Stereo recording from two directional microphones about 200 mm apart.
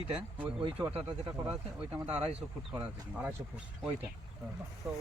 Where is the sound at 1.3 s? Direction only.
15° right (ahead or behind).